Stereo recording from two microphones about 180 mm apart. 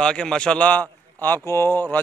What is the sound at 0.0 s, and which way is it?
A man's voice, 5° left (ahead or behind).